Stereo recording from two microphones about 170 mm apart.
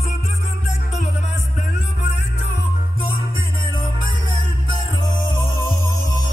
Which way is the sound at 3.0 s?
30° left (ahead or behind).